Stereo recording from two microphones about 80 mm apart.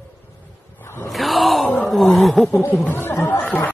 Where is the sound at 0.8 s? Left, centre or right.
Left.